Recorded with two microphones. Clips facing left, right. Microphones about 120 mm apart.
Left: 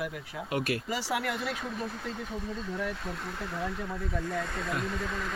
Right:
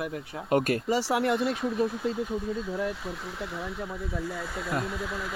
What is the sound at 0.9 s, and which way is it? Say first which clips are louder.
Speech: right 7 dB; 30° right (ahead or behind).